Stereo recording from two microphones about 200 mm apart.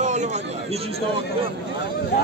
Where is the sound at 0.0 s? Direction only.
35° right (ahead or behind).